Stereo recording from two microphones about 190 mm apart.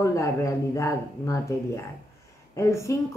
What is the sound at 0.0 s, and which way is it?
Speech, 15° left (ahead or behind).